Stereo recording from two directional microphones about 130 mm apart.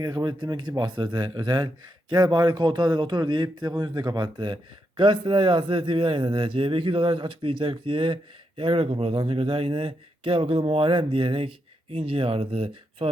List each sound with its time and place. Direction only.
0.0 s a man's voice: 30° right (ahead or behind)